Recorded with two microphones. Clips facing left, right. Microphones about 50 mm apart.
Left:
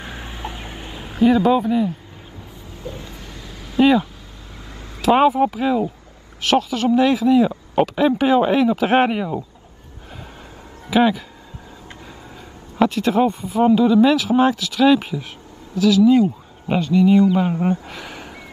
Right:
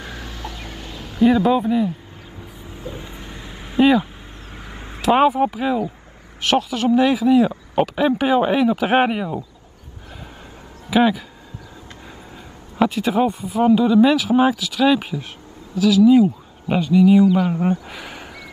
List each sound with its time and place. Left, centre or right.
0.0 s fowl: left
1.2 s speech: centre
2.8 s a sound: right
5.0 s speech: centre
10.9 s speech: centre
12.7 s speech: centre
17.8 s a sound: centre